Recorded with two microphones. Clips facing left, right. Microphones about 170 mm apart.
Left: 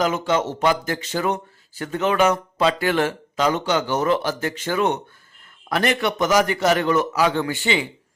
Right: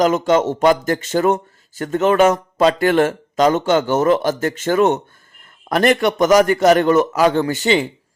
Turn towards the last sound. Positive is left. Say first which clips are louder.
# right 6 dB
turn(degrees=-40)  # may be behind; listen again after turning